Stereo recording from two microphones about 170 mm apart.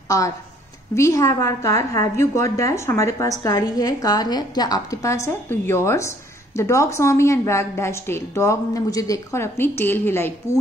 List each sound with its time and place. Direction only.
0.9 s a woman's voice: 20° left (ahead or behind)